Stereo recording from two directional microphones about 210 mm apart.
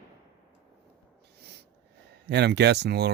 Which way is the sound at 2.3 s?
55° right (ahead or behind).